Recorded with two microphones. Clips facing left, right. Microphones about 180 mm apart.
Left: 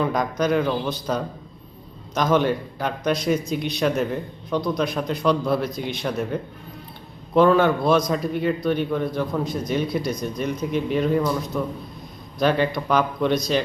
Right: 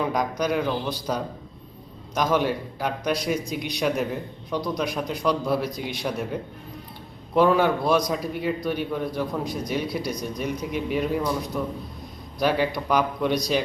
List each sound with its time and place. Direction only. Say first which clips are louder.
0.0 s a man's voice: left 2 dB; 10° right (ahead or behind)
2.1 s a man's voice: left 3 dB; 10° right (ahead or behind)